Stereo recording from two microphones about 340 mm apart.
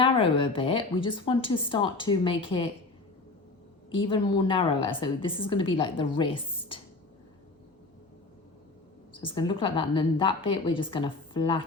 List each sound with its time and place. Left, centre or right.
0.0 s a woman's voice: centre
3.9 s a woman's voice: centre
9.1 s a woman's voice: centre